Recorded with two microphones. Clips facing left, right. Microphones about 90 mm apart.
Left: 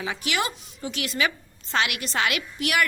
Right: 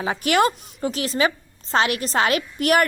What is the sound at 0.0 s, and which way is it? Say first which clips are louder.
A woman's voice: right 8 dB; 45° right (ahead or behind).